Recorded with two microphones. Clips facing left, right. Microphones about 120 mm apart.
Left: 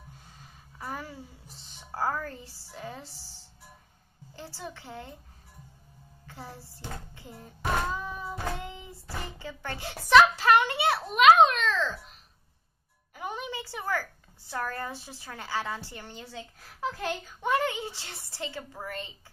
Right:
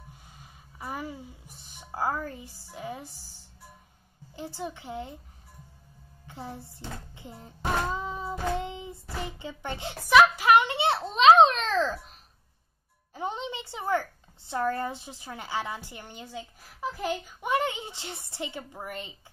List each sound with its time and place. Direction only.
0.3 s music: 15° right (ahead or behind)
4.4 s a woman's voice: 15° right (ahead or behind)
6.2 s music: 20° right (ahead or behind)
9.2 s speech: 20° right (ahead or behind)
10.0 s a sound: 10° right (ahead or behind); by 12.0 s 35° right (ahead or behind)
13.1 s a woman's voice: 25° right (ahead or behind)